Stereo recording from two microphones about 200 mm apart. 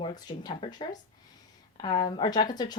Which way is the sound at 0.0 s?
20° left (ahead or behind).